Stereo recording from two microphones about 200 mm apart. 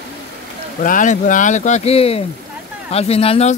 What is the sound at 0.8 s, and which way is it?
Speech, 40° left (ahead or behind).